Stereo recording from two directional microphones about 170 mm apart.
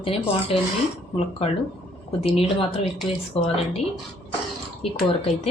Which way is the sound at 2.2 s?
35° left (ahead or behind).